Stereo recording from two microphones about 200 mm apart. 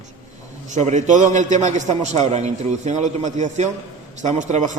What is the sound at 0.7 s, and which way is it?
A man's voice, 35° right (ahead or behind).